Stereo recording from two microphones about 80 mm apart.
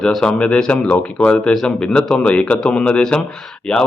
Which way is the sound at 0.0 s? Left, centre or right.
Centre.